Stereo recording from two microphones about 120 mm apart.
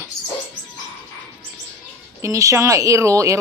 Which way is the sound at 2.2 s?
25° right (ahead or behind).